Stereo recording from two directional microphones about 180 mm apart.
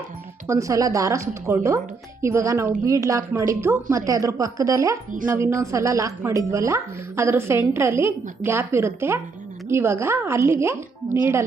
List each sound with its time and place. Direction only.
0.4 s speech: 15° right (ahead or behind)